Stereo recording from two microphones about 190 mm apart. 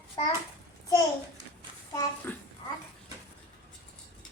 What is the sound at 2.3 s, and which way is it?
Speech, 10° left (ahead or behind).